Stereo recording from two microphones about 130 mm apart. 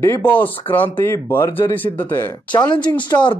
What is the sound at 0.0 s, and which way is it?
Speech, 15° left (ahead or behind).